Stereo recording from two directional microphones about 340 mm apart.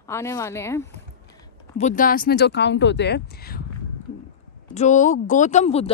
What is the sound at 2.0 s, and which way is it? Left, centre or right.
Speech, left.